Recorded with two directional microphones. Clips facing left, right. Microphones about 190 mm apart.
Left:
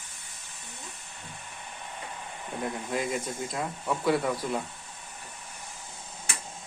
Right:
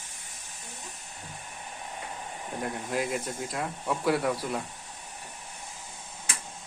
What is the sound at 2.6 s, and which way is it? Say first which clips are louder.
Speech: even; centre (ahead or behind).